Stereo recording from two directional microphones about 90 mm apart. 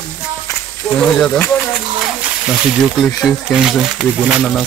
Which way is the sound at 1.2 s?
5° left (ahead or behind).